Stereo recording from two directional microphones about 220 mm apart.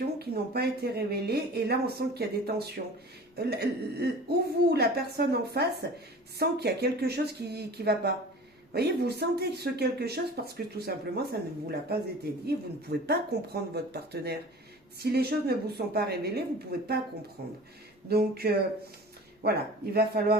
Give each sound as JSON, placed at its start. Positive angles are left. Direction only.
{"t": 0.2, "sound": "speech", "side_deg": -45}
{"t": 17.4, "sound": "speech", "side_deg": -45}